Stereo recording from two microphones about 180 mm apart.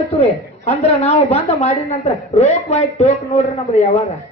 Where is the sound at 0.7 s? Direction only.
35° left (ahead or behind).